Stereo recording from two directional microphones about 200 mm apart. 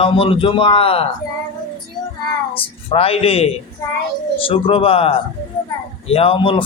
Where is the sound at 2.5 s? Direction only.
30° left (ahead or behind).